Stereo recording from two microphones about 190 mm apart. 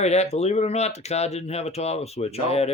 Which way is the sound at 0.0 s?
35° left (ahead or behind).